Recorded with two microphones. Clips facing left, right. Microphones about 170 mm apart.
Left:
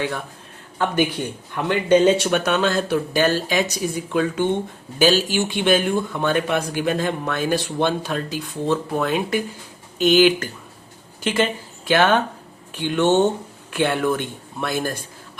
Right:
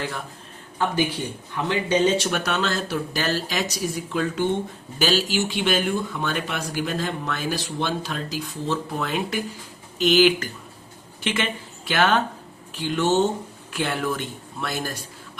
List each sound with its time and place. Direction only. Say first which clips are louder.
1.5 s speech: left 5 dB; 55° left (ahead or behind)
11.2 s speech: left 6 dB; 40° left (ahead or behind)
11.9 s speech: left 4 dB; 50° left (ahead or behind)